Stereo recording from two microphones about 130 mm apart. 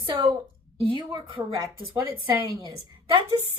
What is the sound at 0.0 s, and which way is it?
Speech, 35° right (ahead or behind).